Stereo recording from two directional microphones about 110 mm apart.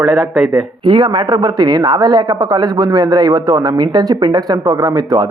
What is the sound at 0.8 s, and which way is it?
Speech, 45° right (ahead or behind).